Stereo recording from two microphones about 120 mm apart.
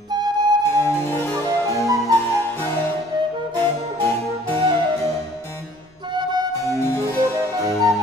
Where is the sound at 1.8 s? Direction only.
30° right (ahead or behind).